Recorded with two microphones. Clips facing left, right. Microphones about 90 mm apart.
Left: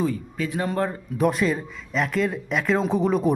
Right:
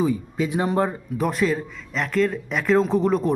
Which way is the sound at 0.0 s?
15° right (ahead or behind).